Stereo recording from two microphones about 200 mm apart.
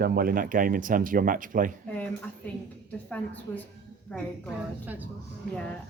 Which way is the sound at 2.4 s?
5° left (ahead or behind).